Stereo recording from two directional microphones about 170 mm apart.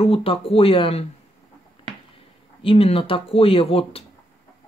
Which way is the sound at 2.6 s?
35° left (ahead or behind).